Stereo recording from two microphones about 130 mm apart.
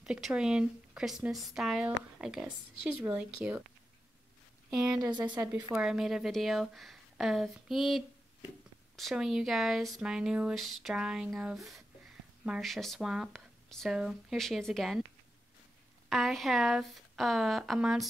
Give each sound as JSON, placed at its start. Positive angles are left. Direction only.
{"t": 0.0, "sound": "speech", "side_deg": -5}
{"t": 4.6, "sound": "speech", "side_deg": -5}
{"t": 5.0, "sound": "a woman's voice", "side_deg": -30}
{"t": 5.8, "sound": "speech", "side_deg": -5}
{"t": 16.1, "sound": "speech", "side_deg": 0}